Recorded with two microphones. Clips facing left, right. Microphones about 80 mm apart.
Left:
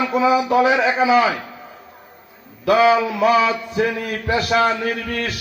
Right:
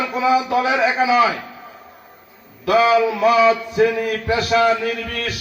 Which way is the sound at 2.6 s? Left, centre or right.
Left.